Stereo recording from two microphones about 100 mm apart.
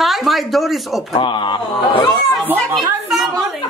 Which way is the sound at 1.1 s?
55° left (ahead or behind).